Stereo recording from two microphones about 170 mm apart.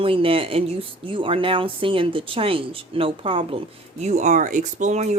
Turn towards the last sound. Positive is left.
turn(degrees=-45)  # may be behind; listen again after turning